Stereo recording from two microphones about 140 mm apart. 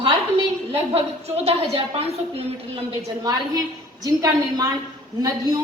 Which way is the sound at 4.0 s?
25° right (ahead or behind).